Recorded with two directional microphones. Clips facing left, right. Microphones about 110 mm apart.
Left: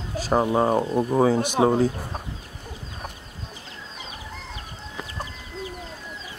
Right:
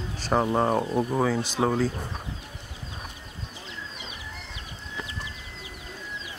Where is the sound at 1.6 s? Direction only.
60° left (ahead or behind).